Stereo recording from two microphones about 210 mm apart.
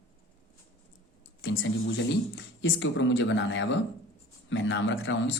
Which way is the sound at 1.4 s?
60° left (ahead or behind).